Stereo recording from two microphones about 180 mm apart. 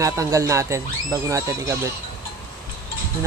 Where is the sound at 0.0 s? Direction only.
15° right (ahead or behind).